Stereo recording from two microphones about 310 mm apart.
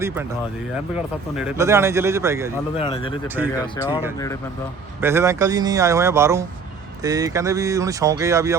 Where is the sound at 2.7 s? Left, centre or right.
Centre.